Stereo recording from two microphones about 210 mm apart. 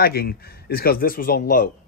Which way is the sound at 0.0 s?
45° left (ahead or behind).